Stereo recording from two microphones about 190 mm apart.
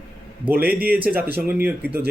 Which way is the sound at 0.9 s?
10° right (ahead or behind).